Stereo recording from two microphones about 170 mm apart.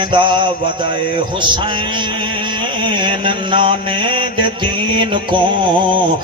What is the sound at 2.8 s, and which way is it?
Mantra, 30° right (ahead or behind).